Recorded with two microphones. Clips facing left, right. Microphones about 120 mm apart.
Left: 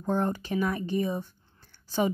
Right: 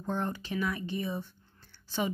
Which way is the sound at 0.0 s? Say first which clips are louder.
Left 6 dB; 45° left (ahead or behind).